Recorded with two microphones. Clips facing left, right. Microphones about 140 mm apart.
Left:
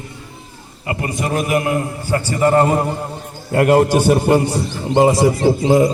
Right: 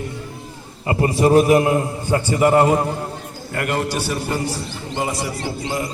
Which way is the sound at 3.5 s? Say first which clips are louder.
Left 10 dB; 40° left (ahead or behind).